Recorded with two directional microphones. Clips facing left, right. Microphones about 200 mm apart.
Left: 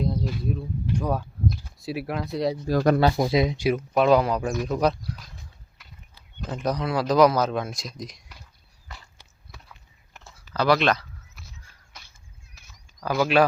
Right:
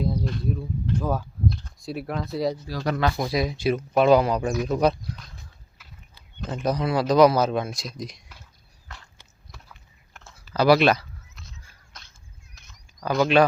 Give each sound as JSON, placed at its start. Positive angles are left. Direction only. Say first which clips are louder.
{"t": 0.3, "sound": "speech", "louder": "right 1 dB", "side_deg": 5}
{"t": 2.6, "sound": "speech", "louder": "left 7 dB", "side_deg": 50}
{"t": 3.0, "sound": "speech", "louder": "left 3 dB", "side_deg": 25}
{"t": 3.7, "sound": "speech", "louder": "right 3 dB", "side_deg": 0}
{"t": 6.4, "sound": "speech", "louder": "right 2 dB", "side_deg": 0}
{"t": 9.5, "sound": "biting", "louder": "even", "side_deg": 0}
{"t": 10.5, "sound": "speech", "louder": "right 3 dB", "side_deg": -10}
{"t": 12.5, "sound": "a sound", "louder": "right 1 dB", "side_deg": 5}